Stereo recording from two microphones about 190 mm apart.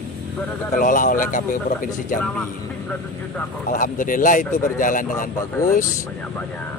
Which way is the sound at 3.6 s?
45° left (ahead or behind).